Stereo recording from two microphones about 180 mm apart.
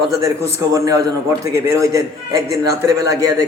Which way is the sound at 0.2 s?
20° right (ahead or behind).